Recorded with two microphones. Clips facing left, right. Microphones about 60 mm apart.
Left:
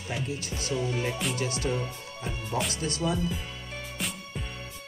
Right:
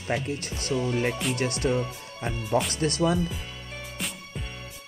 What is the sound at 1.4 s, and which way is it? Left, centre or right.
Speech, right.